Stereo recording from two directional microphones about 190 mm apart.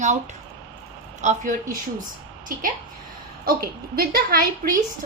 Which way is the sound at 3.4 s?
50° right (ahead or behind).